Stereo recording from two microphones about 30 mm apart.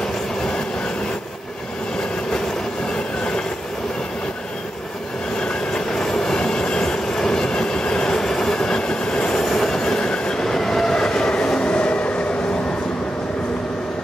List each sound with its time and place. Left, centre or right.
5.4 s train: left
8.5 s train: left